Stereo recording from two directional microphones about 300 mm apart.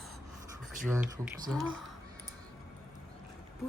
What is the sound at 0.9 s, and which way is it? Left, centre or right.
Speech, centre.